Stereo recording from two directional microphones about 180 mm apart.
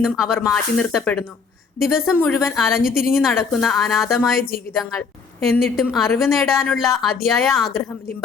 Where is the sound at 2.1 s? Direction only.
10° left (ahead or behind).